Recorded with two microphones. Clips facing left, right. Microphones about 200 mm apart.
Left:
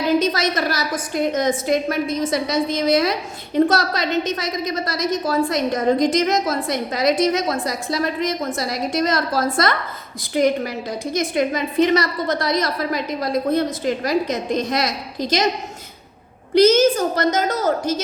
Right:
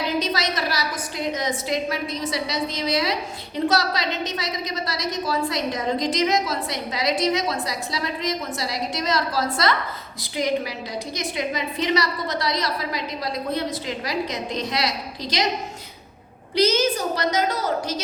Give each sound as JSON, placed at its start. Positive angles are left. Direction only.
{"t": 0.2, "sound": "a woman's voice", "side_deg": 50}
{"t": 16.6, "sound": "a woman's voice", "side_deg": 50}